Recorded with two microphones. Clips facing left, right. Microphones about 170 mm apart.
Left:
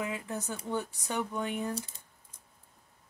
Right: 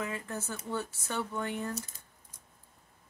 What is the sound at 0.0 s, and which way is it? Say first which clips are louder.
Speech: left 1 dB; 15° left (ahead or behind).